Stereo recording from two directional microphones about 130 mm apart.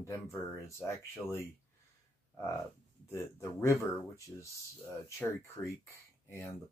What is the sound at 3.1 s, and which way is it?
Speech, 20° left (ahead or behind).